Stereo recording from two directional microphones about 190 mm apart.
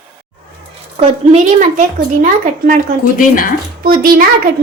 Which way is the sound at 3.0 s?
45° left (ahead or behind).